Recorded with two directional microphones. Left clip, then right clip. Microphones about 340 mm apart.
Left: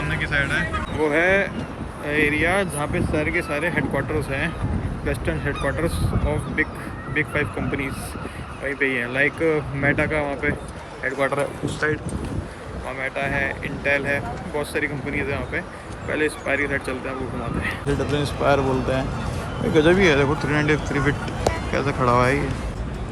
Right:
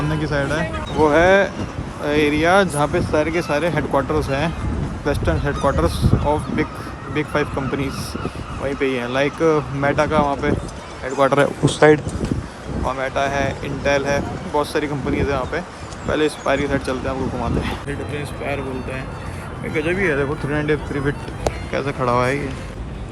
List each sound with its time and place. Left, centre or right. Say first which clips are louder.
1.0 s speech: right 6 dB; centre
13.0 s speech: right 2 dB; centre
18.2 s speech: left 8 dB; centre